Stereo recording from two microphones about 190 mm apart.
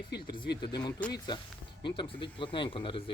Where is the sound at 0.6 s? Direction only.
20° left (ahead or behind).